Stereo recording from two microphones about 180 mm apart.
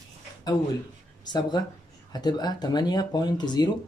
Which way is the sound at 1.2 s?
25° left (ahead or behind).